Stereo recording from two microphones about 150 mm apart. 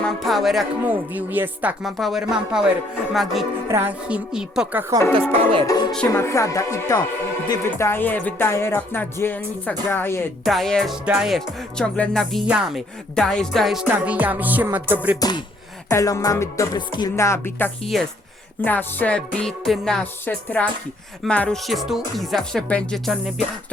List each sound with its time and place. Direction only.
0.0 s speech: centre (ahead or behind)
0.9 s music: 10° right (ahead or behind)
1.8 s speech: centre (ahead or behind)
3.7 s music: 15° right (ahead or behind)
5.3 s music: 35° right (ahead or behind)
5.6 s music: 25° left (ahead or behind)
10.4 s speech: centre (ahead or behind)
12.5 s music: 5° right (ahead or behind)
15.2 s music: 30° left (ahead or behind)
17.8 s speech: centre (ahead or behind)
18.6 s music: 10° left (ahead or behind)
21.2 s speech: 5° left (ahead or behind)